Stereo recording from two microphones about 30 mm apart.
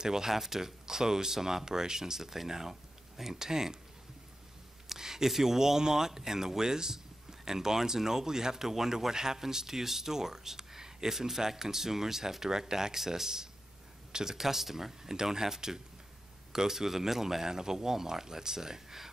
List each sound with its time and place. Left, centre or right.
0.0 s speech: centre
4.8 s speech: centre